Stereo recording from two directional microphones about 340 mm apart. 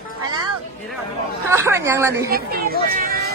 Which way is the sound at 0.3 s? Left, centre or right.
Centre.